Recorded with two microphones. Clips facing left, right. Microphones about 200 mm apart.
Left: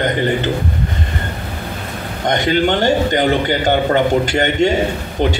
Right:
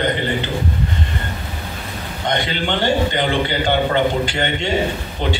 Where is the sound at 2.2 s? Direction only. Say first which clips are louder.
Left 6 dB; 45° left (ahead or behind).